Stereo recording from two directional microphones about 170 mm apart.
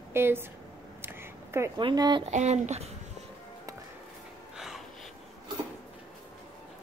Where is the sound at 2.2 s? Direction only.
40° right (ahead or behind).